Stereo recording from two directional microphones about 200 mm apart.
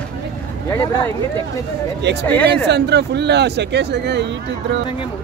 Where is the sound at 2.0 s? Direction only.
60° right (ahead or behind).